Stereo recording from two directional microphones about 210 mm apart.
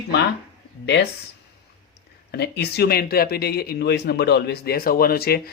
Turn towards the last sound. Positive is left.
turn(degrees=45)  # may be behind; listen again after turning